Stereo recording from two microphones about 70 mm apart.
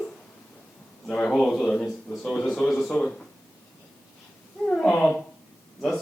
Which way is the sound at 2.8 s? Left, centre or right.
Left.